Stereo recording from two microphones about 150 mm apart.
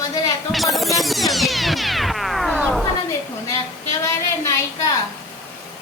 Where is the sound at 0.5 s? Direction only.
Centre (ahead or behind).